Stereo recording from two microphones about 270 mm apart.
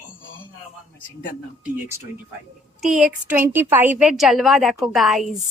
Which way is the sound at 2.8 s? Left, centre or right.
Centre.